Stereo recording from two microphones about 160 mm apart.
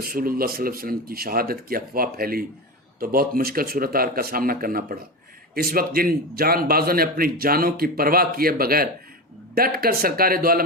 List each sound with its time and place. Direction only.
0.0 s a man's voice: 65° right (ahead or behind)